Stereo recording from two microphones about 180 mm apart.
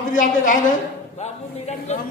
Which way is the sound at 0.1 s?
45° left (ahead or behind).